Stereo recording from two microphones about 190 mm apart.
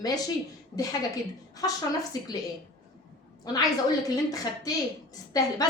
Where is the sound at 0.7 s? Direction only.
20° left (ahead or behind).